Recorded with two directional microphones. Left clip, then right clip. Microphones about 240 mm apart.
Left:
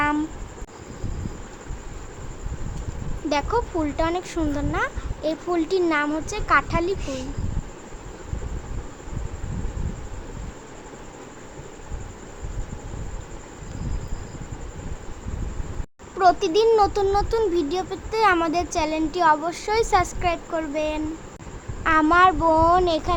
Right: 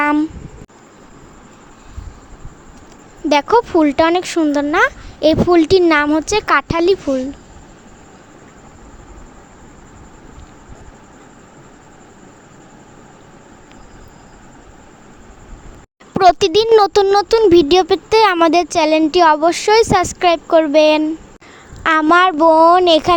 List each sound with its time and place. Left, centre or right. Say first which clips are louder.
0.0 s a sound: right 8 dB; right
3.2 s speech: right 11 dB; right
16.1 s speech: right 7 dB; right
22.0 s speech: right 7 dB; right